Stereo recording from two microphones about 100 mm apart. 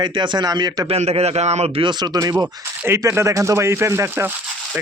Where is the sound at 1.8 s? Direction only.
45° right (ahead or behind).